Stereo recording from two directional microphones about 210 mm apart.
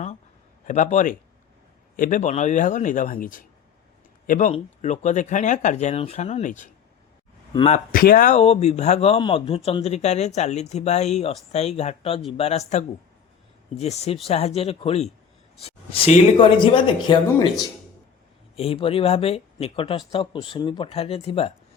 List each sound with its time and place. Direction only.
0.7 s speech: 35° left (ahead or behind)
7.9 s speech: 40° left (ahead or behind)